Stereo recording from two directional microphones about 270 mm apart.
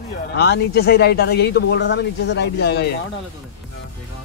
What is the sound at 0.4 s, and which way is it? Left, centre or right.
Speech, left.